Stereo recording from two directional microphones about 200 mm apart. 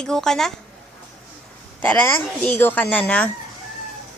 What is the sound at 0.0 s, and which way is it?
Speech, centre (ahead or behind).